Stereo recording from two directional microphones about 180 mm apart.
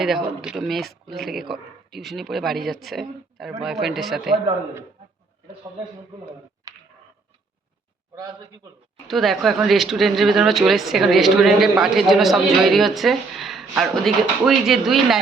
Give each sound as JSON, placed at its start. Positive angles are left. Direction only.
{"t": 0.0, "sound": "speech", "side_deg": 0}
{"t": 6.7, "sound": "a sound", "side_deg": -20}
{"t": 9.0, "sound": "speech", "side_deg": 0}